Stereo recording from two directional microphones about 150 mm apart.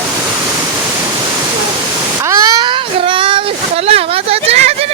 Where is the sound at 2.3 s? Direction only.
20° right (ahead or behind).